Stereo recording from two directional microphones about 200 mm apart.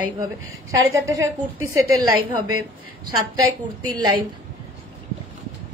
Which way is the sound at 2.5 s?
90° right.